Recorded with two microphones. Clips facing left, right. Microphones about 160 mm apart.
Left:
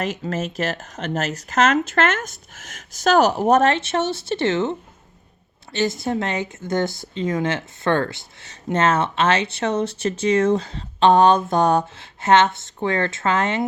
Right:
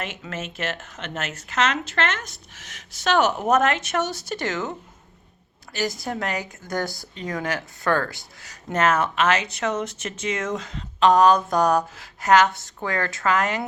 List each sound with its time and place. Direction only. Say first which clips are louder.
0.0 s speech: left 7 dB; 40° left (ahead or behind)
5.7 s speech: left 5 dB; 25° left (ahead or behind)